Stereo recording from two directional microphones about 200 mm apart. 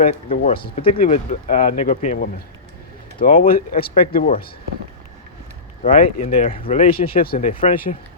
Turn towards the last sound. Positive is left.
turn(degrees=30)  # may be behind; listen again after turning